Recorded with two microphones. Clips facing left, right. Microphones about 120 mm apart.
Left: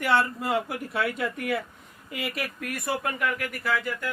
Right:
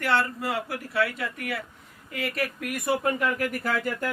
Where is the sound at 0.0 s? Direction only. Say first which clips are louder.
Left 1 dB; 15° left (ahead or behind).